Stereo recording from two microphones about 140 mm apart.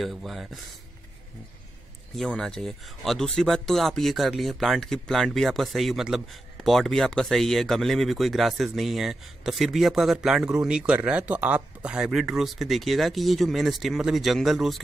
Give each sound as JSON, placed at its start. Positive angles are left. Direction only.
{"t": 0.0, "sound": "speech", "side_deg": 0}
{"t": 2.1, "sound": "speech", "side_deg": 5}